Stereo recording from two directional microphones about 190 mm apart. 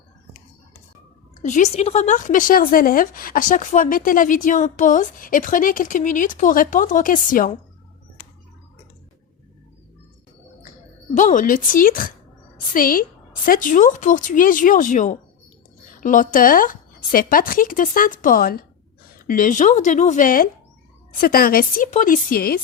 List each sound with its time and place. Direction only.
1.4 s speech: 40° left (ahead or behind)
11.1 s speech: 40° left (ahead or behind)